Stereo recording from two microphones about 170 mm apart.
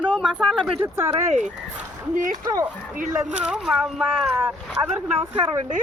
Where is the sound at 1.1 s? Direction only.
45° right (ahead or behind).